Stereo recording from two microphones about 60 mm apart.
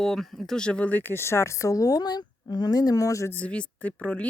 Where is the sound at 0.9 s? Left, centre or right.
Left.